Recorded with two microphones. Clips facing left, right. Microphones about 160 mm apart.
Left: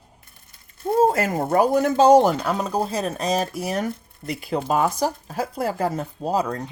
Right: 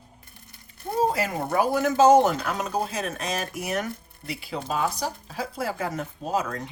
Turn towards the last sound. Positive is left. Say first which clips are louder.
# left 4 dB
turn(degrees=35)  # may be behind; listen again after turning